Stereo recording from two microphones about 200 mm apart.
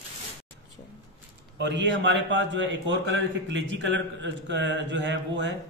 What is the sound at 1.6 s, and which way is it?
A man's voice, 65° right (ahead or behind).